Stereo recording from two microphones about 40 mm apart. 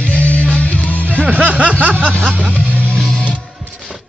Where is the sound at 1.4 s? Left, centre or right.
Right.